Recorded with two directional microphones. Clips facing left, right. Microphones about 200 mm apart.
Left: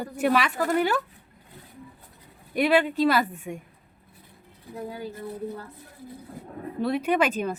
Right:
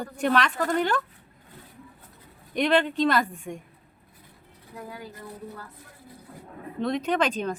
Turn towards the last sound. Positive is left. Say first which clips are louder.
# left 2 dB
turn(degrees=10)  # may be behind; listen again after turning